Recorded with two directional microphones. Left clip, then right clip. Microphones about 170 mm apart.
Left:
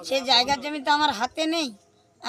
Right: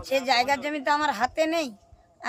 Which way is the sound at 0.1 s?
5° right (ahead or behind).